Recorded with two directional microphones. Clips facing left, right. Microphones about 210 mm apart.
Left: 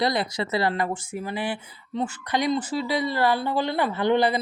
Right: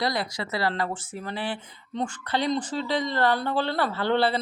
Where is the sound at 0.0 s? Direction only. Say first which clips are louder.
Left 4 dB; 20° left (ahead or behind).